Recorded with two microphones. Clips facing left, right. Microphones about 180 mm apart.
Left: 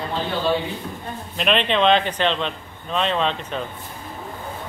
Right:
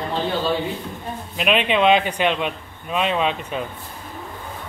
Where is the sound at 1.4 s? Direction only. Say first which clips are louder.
Right 1 dB; 10° right (ahead or behind).